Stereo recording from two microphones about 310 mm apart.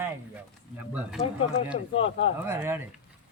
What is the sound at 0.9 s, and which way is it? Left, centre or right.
Speech, centre.